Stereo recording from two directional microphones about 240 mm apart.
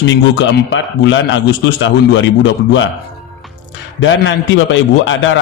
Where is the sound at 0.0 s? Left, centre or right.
Left.